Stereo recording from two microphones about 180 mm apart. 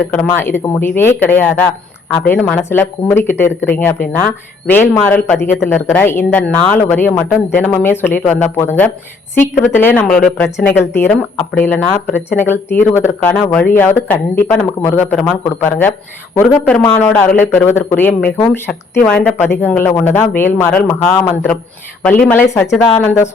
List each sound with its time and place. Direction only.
0.3 s speech: 10° left (ahead or behind)